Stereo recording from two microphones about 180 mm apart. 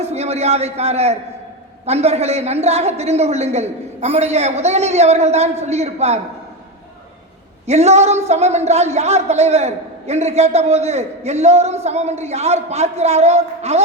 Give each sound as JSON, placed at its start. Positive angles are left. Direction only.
{"t": 0.0, "sound": "a man's voice", "side_deg": -35}
{"t": 7.7, "sound": "a man's voice", "side_deg": -35}